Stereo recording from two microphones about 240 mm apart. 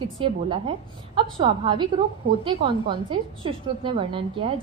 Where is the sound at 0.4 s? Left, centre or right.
Right.